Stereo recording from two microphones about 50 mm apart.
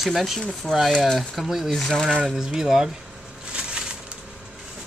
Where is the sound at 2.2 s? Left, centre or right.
Centre.